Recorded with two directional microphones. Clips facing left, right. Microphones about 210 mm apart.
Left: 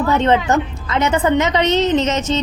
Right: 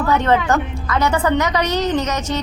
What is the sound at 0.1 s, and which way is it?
A woman's voice, 20° left (ahead or behind).